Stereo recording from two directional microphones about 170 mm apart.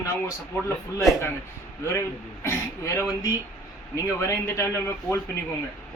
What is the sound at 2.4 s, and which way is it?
Speech, 15° left (ahead or behind).